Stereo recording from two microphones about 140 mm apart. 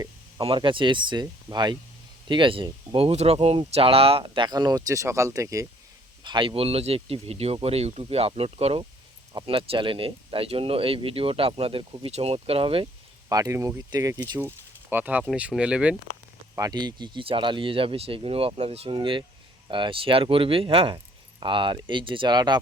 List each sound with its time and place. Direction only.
0.3 s speech: 35° right (ahead or behind)
6.2 s speech: 35° right (ahead or behind)
13.2 s speech: 25° right (ahead or behind); by 16.0 s 10° right (ahead or behind)
16.6 s speech: 30° right (ahead or behind)